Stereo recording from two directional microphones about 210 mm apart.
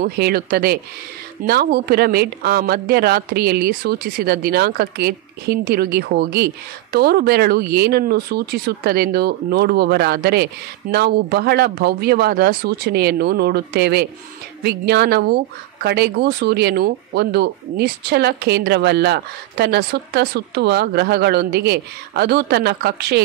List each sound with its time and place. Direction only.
0.0 s speech: 45° right (ahead or behind)